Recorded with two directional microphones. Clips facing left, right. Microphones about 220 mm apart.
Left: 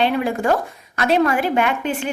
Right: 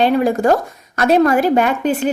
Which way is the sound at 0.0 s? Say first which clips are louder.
Right 5 dB; 40° right (ahead or behind).